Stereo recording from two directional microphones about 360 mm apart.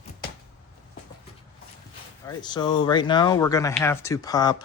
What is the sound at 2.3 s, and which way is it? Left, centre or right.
Speech, centre.